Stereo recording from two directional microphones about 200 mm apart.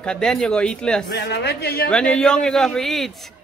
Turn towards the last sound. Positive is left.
turn(degrees=0)  # may be behind; listen again after turning